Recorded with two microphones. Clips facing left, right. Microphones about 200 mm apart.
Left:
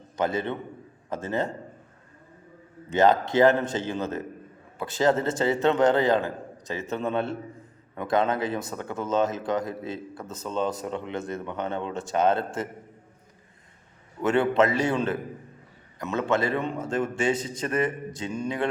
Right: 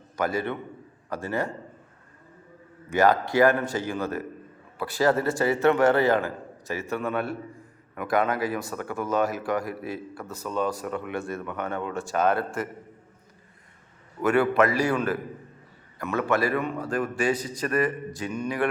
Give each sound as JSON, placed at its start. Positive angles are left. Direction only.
{"t": 0.2, "sound": "speech", "side_deg": 20}
{"t": 2.9, "sound": "speech", "side_deg": 20}
{"t": 14.2, "sound": "speech", "side_deg": 25}